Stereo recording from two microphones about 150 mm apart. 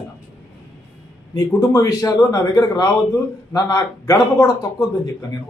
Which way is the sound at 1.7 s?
20° left (ahead or behind).